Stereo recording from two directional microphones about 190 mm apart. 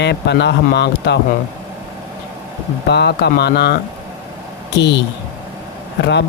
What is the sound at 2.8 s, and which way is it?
Speech, 60° left (ahead or behind).